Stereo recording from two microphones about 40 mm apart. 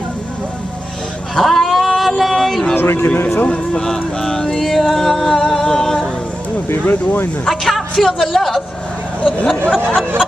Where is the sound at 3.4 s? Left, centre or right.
Centre.